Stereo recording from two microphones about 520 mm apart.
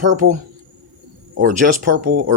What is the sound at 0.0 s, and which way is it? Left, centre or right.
Speech, centre.